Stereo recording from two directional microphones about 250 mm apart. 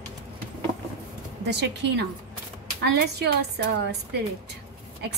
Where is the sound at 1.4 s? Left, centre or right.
Right.